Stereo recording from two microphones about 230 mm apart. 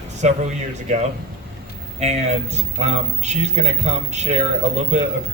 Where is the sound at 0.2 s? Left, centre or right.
Right.